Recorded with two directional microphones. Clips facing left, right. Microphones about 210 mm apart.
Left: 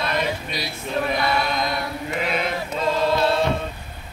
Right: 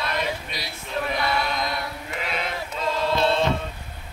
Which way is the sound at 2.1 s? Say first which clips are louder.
Left 6 dB; 15° left (ahead or behind).